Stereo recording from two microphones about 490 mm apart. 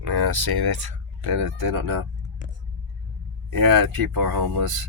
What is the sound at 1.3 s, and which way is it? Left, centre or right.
Speech, right.